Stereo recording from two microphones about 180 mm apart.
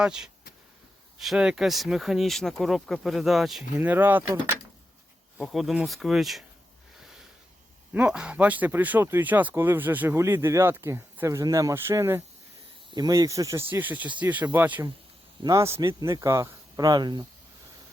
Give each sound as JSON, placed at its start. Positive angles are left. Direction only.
{"t": 0.0, "sound": "speech", "side_deg": -5}
{"t": 3.8, "sound": "speech", "side_deg": -10}
{"t": 5.4, "sound": "speech", "side_deg": 0}
{"t": 7.0, "sound": "sniff", "side_deg": -5}
{"t": 7.9, "sound": "speech", "side_deg": -5}